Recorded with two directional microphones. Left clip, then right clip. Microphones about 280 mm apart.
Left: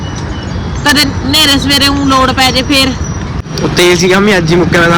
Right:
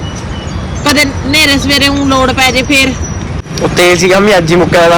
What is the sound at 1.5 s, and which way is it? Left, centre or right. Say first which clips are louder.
Speech: even; centre.